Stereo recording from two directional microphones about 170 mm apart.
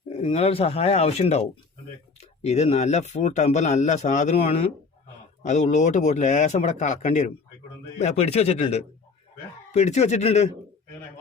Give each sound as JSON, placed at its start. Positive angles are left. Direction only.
{"t": 0.1, "sound": "speech", "side_deg": 35}